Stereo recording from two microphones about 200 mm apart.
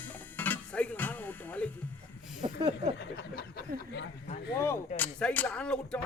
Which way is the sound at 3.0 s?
50° left (ahead or behind).